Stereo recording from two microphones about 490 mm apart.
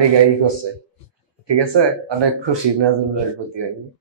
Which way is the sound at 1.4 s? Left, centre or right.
Right.